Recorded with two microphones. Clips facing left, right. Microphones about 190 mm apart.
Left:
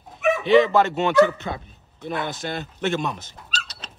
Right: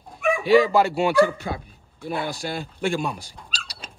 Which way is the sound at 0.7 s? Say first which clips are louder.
Even; 10° right (ahead or behind).